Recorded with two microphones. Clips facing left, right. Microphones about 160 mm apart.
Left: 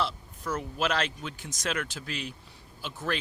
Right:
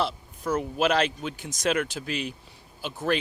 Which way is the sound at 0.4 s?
25° right (ahead or behind).